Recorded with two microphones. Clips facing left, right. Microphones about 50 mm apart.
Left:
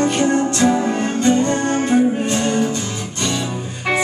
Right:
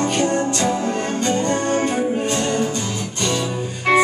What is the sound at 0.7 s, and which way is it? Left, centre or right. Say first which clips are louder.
Music: left 3 dB; centre.